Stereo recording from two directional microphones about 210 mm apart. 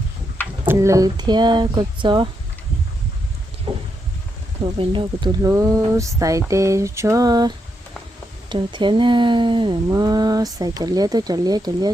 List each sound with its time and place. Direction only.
0.7 s speech: 15° right (ahead or behind)
3.7 s vehicle: 25° right (ahead or behind)
4.6 s speech: 25° right (ahead or behind)